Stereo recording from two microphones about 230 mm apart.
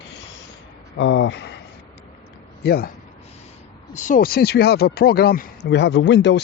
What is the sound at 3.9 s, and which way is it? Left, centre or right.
Speech, left.